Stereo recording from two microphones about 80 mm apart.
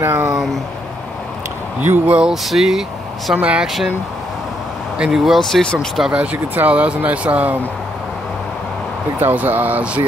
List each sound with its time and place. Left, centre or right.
0.0 s speech: right
1.8 s speech: right
2.1 s speech: centre
3.3 s speech: centre
3.6 s speech: centre
4.9 s speech: centre
6.1 s speech: right
9.2 s speech: right